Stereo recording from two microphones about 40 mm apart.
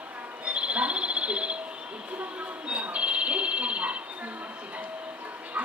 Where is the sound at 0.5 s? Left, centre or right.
Right.